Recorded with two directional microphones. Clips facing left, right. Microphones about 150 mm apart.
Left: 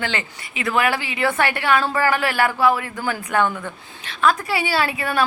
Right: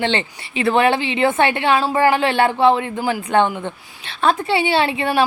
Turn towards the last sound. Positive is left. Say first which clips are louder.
# right 4 dB
turn(degrees=-25)  # may be behind; listen again after turning